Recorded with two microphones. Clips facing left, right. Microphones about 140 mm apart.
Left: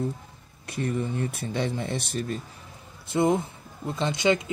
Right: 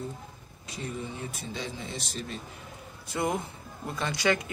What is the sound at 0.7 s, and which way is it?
Speech, 60° left (ahead or behind).